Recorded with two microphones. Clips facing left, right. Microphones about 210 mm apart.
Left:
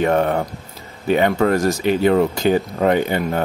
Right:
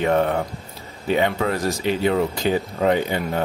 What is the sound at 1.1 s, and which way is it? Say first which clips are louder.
Speech: left 5 dB; 50° left (ahead or behind).